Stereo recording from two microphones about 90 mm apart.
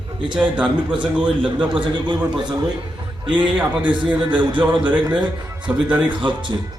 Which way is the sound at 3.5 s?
15° right (ahead or behind).